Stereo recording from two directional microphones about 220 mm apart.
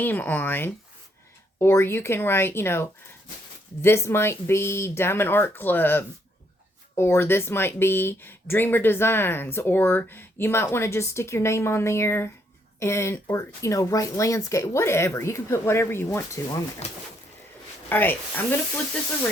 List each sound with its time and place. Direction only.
0.0 s speech: 10° left (ahead or behind)
16.8 s speech: 30° left (ahead or behind)
17.8 s speech: 10° left (ahead or behind)